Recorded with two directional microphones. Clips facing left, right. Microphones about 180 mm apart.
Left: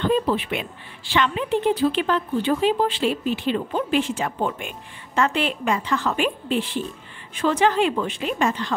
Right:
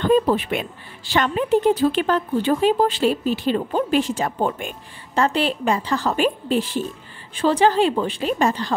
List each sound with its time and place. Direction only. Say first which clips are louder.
0.0 s speech: right 4 dB; 45° right (ahead or behind)